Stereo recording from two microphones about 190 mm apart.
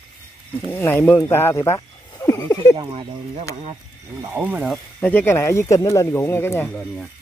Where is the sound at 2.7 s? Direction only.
25° right (ahead or behind).